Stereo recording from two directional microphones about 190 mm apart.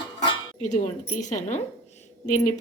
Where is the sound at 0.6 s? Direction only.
40° left (ahead or behind).